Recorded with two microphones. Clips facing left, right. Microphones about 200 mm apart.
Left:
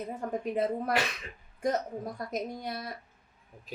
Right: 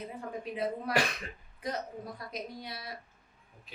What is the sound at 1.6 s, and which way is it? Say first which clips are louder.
A woman's voice: left 7 dB; 45° left (ahead or behind).